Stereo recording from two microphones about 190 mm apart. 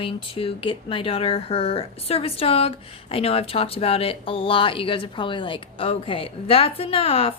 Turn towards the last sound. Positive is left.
turn(degrees=30)  # may be behind; listen again after turning